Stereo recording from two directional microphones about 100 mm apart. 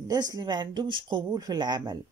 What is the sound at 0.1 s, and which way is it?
Speech, 40° right (ahead or behind).